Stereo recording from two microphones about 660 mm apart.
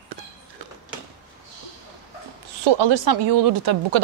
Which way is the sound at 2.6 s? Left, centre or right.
Right.